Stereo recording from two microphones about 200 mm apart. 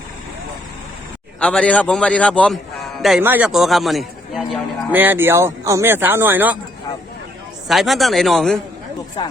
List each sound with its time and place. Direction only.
1.4 s a man's voice: 5° left (ahead or behind)
7.7 s speech: centre (ahead or behind)
9.2 s speech: 25° left (ahead or behind)